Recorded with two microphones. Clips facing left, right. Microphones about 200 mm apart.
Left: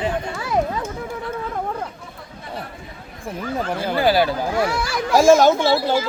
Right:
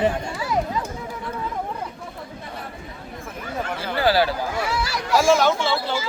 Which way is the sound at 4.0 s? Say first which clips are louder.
Left 1 dB; 15° left (ahead or behind).